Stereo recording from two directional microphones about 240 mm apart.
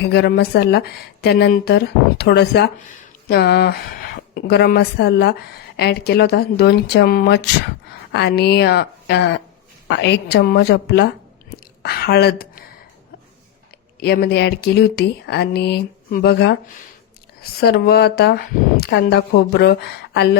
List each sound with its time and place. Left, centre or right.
0.0 s a woman's voice: left
14.0 s a woman's voice: left